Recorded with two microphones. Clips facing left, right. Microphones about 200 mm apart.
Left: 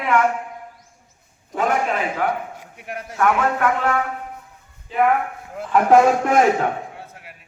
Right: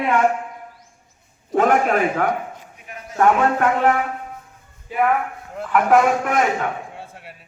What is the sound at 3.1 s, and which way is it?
Speech, 30° right (ahead or behind).